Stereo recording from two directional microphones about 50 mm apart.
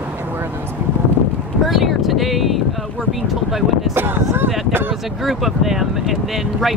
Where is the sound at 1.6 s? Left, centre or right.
Centre.